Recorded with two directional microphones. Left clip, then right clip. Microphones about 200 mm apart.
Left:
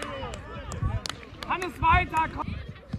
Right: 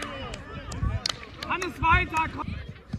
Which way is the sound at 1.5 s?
45° left (ahead or behind).